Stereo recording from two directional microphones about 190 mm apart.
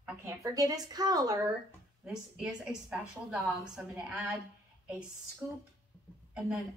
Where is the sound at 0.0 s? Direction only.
10° right (ahead or behind).